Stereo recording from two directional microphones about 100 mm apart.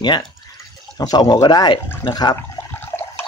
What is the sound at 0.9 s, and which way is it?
Speech, 40° left (ahead or behind).